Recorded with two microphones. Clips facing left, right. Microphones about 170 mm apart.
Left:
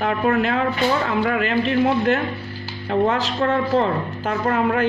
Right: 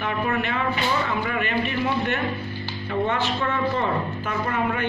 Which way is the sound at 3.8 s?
75° left (ahead or behind).